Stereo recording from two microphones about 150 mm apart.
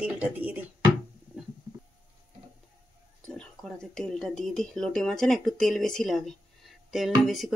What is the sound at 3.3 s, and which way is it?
Speech, 5° left (ahead or behind).